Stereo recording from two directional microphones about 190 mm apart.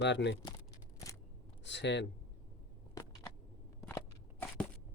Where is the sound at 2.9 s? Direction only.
20° left (ahead or behind).